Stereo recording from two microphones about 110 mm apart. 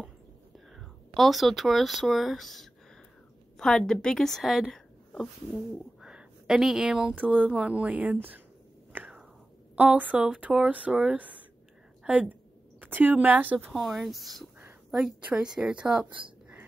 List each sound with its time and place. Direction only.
0.7 s a woman's voice: centre (ahead or behind)
8.9 s whispering: 15° right (ahead or behind)
9.8 s a woman's voice: 15° right (ahead or behind)
13.7 s speech: centre (ahead or behind)